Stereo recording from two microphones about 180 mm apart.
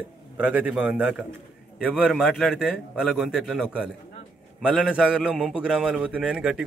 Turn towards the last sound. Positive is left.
turn(degrees=-5)  # may be behind; listen again after turning